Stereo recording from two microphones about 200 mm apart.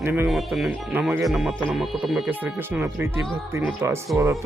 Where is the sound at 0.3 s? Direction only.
Centre (ahead or behind).